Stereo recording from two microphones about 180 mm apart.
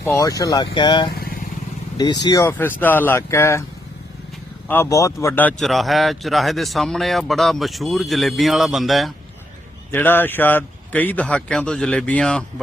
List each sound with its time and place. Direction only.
0.0 s speech: 15° left (ahead or behind)
1.1 s vehicle: 55° left (ahead or behind)
2.0 s speech: 20° left (ahead or behind)
4.7 s speech: 15° left (ahead or behind); by 9.1 s centre (ahead or behind)
9.9 s speech: 10° left (ahead or behind)